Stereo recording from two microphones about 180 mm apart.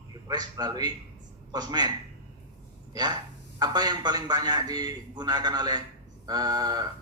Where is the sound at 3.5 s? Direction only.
20° right (ahead or behind).